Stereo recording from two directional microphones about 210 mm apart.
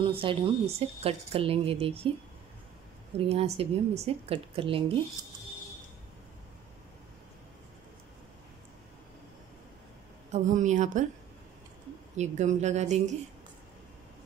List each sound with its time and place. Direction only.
0.0 s speech: 25° right (ahead or behind)
3.3 s speech: 30° right (ahead or behind)
10.3 s speech: 35° right (ahead or behind)
12.2 s speech: 35° right (ahead or behind)